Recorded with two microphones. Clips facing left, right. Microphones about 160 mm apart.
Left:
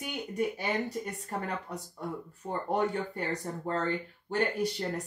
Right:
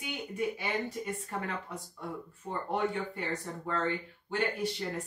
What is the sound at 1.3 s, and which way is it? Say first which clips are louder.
Speech: left 3 dB; 40° left (ahead or behind).